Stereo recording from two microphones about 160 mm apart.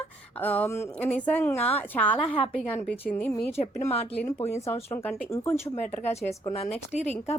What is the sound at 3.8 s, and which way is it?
Speech, 40° left (ahead or behind).